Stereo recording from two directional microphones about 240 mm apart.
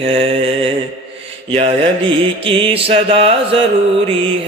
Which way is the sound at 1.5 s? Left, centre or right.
Right.